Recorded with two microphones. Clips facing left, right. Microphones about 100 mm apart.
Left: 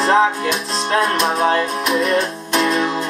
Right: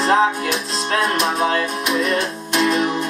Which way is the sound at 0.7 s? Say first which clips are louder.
Left 3 dB; 35° left (ahead or behind).